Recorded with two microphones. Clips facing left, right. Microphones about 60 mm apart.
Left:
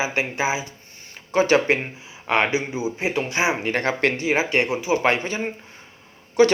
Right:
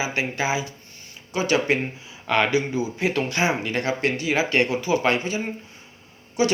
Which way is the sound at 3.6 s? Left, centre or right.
Left.